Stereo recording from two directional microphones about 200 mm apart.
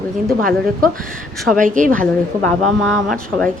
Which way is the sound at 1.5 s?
40° right (ahead or behind).